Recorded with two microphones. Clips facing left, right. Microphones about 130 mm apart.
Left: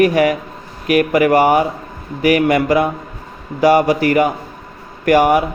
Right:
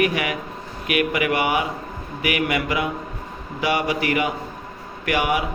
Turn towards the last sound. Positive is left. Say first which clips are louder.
# left 10 dB
turn(degrees=45)  # may be behind; listen again after turning